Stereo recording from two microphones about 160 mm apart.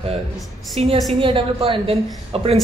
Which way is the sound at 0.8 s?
40° right (ahead or behind).